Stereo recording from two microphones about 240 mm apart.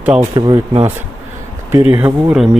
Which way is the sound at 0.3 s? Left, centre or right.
Centre.